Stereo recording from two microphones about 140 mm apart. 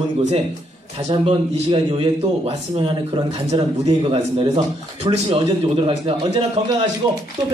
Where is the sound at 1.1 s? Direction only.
35° right (ahead or behind).